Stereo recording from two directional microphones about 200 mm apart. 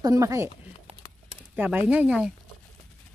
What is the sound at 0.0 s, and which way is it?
Speech, 15° right (ahead or behind).